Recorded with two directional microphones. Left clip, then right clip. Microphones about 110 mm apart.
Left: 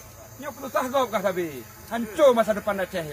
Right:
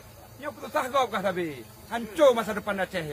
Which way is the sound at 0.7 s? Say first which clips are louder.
Left 2 dB; 30° right (ahead or behind).